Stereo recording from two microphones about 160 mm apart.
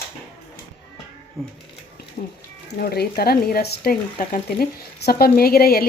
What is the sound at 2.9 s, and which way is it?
Speech, 80° left.